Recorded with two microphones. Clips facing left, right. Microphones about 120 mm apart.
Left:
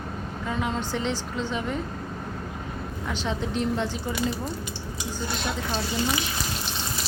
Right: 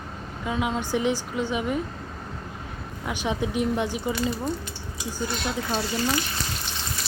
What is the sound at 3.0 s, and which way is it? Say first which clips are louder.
A woman's voice: right 3 dB; 15° right (ahead or behind).